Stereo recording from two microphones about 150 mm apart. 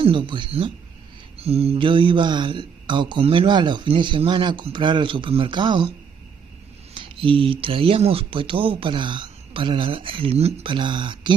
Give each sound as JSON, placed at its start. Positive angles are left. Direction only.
{"t": 0.0, "sound": "speech", "side_deg": -35}